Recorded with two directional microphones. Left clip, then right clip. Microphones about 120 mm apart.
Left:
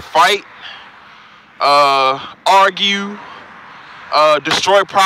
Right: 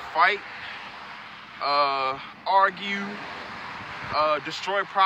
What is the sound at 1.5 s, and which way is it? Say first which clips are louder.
Speech: left 12 dB; 75° left (ahead or behind).